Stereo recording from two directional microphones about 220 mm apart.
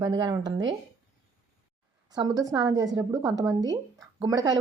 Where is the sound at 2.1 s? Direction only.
15° right (ahead or behind).